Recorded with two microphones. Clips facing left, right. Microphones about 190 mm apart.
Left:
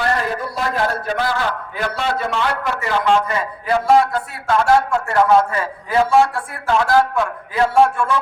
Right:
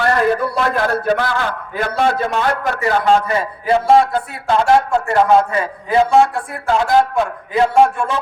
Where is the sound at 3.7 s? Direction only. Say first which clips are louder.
Right 2 dB; 25° right (ahead or behind).